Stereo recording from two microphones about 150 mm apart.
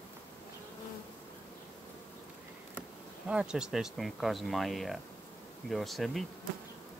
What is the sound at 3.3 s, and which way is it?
Speech, 5° right (ahead or behind).